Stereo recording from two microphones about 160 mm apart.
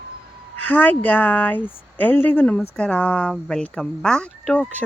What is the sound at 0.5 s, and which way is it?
Speech, 10° left (ahead or behind).